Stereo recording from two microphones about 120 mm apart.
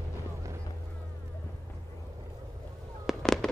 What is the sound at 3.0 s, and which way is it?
Fireworks, 5° left (ahead or behind).